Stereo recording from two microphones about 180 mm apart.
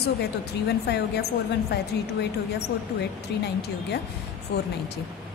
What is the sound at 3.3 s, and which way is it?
Speech, 70° left (ahead or behind).